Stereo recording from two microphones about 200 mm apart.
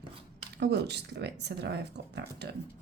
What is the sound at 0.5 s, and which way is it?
Speech, 55° right (ahead or behind).